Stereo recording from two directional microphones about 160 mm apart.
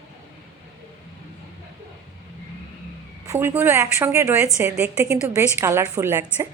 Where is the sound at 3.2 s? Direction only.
15° right (ahead or behind).